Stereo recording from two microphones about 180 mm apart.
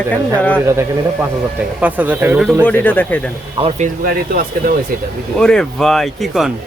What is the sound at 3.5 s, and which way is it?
Speech, 35° right (ahead or behind).